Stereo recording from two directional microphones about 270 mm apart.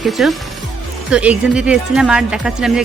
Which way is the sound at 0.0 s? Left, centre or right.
Centre.